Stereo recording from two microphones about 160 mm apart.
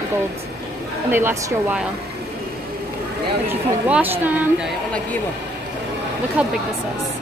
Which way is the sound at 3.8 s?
10° right (ahead or behind).